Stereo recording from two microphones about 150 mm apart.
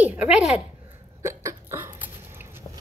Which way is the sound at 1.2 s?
15° right (ahead or behind).